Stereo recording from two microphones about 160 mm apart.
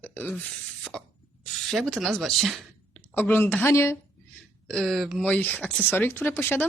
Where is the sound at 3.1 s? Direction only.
10° left (ahead or behind).